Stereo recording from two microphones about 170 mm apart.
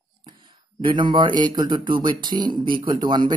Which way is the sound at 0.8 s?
30° right (ahead or behind).